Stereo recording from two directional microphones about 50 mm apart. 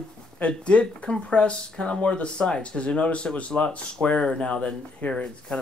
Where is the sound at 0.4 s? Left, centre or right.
Left.